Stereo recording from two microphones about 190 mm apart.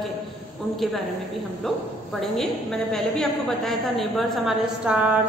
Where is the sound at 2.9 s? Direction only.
Centre (ahead or behind).